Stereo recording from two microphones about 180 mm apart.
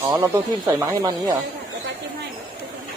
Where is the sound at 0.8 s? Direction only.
15° right (ahead or behind).